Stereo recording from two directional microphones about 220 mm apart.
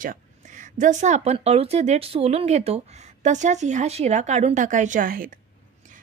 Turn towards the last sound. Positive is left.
turn(degrees=-40)  # may be behind; listen again after turning